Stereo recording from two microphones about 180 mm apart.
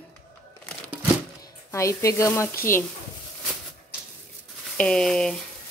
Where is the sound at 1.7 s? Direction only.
15° left (ahead or behind).